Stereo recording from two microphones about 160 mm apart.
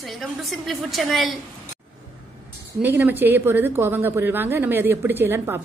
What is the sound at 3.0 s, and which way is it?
A woman's voice, 10° right (ahead or behind).